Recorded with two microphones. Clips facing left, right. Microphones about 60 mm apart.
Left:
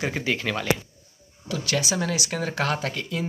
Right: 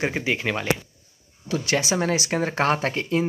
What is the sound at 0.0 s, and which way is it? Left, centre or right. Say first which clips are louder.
Speech: right 2 dB; right.